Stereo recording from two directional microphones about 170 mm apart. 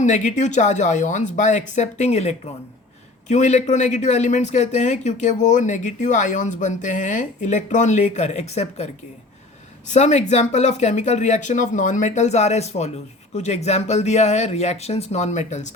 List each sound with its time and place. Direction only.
0.0 s speech: 45° left (ahead or behind)
9.9 s speech: 45° left (ahead or behind)